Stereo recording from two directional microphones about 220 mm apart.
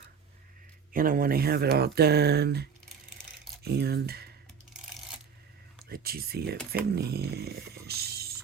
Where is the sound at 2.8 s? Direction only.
Centre (ahead or behind).